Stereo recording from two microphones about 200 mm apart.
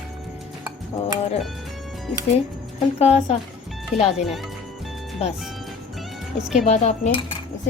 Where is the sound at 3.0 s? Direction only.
30° left (ahead or behind).